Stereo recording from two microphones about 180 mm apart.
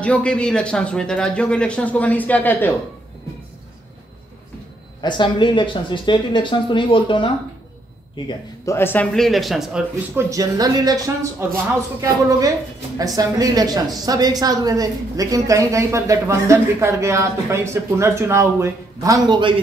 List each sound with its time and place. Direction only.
0.0 s speech: 5° left (ahead or behind)
5.0 s speech: 25° left (ahead or behind)
8.3 s speech: 15° left (ahead or behind); by 9.8 s centre (ahead or behind)
10.1 s a woman's voice: 20° right (ahead or behind)